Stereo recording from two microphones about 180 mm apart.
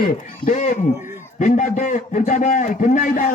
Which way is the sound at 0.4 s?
40° left (ahead or behind).